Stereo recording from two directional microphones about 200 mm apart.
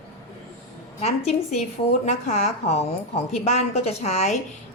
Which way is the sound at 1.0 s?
35° left (ahead or behind).